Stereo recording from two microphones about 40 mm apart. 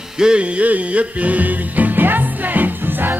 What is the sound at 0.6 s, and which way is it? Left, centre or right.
Music, right.